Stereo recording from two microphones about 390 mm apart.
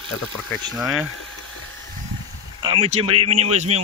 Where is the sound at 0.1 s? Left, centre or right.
Centre.